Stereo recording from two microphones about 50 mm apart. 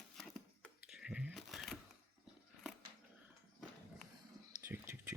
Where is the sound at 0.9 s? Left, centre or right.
Centre.